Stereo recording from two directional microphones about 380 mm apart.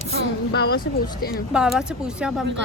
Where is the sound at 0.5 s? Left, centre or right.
Left.